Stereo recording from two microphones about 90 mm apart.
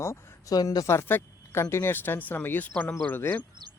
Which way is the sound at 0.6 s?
50° left (ahead or behind).